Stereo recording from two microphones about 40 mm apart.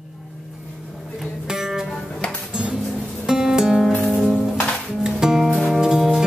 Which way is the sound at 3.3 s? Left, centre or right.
Centre.